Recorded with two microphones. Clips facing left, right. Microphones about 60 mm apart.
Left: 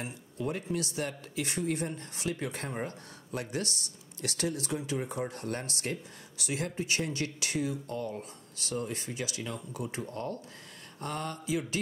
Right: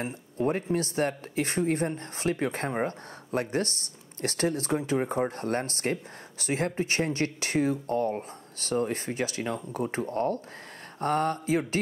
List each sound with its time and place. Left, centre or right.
0.0 s speech: right